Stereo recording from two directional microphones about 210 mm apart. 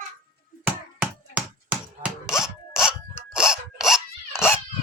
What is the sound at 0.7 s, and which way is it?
Sawing, 5° right (ahead or behind).